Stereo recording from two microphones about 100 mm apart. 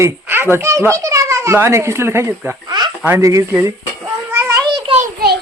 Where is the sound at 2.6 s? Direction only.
45° right (ahead or behind).